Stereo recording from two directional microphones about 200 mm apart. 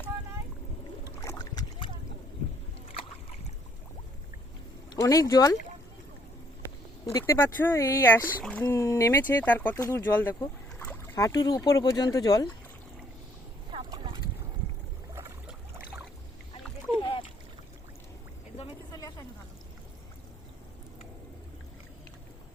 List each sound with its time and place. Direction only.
1.2 s boat: 15° left (ahead or behind)
2.9 s boat: 30° left (ahead or behind)
4.9 s speech: 15° left (ahead or behind)
7.0 s speech: 15° left (ahead or behind)
13.7 s boat: 25° right (ahead or behind)
15.1 s boat: 10° right (ahead or behind)
16.9 s splash: 25° left (ahead or behind)
18.5 s a sound: 25° left (ahead or behind)